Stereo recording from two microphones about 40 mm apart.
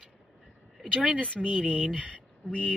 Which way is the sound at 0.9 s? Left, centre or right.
Right.